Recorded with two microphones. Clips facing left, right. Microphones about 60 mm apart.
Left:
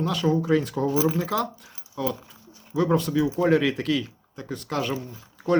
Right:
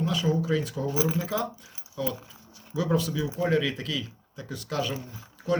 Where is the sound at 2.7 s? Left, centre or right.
Left.